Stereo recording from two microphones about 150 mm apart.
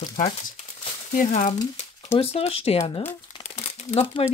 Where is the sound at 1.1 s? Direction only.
60° left (ahead or behind).